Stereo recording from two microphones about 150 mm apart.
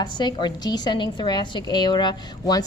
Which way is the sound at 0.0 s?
30° left (ahead or behind).